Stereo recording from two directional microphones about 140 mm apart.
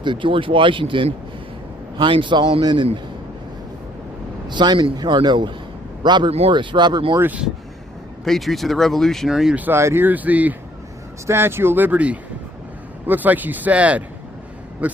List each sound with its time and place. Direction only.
0.0 s a man's voice: 35° right (ahead or behind)
4.4 s a man's voice: 30° right (ahead or behind)
7.2 s speech: 10° right (ahead or behind)
8.2 s speech: centre (ahead or behind)